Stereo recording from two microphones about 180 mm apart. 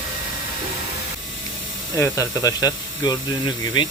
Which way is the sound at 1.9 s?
15° left (ahead or behind).